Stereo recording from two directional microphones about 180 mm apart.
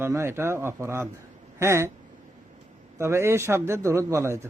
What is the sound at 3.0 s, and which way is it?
Speech, 15° right (ahead or behind).